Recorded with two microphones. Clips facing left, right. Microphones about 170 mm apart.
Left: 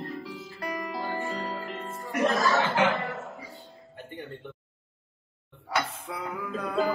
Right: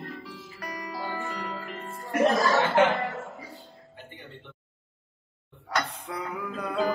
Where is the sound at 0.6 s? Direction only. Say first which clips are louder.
Left 3 dB; 25° left (ahead or behind).